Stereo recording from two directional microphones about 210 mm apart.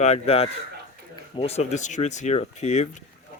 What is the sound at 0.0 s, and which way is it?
Speech, 30° left (ahead or behind).